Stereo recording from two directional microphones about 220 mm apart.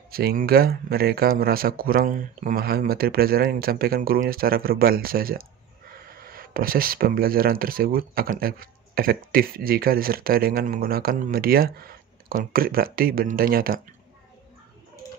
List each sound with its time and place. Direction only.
0.1 s speech: 40° right (ahead or behind)